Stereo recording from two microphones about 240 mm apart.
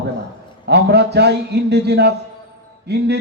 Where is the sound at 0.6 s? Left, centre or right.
Right.